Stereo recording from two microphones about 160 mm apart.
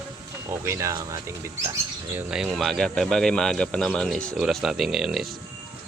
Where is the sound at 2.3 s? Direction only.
Centre (ahead or behind).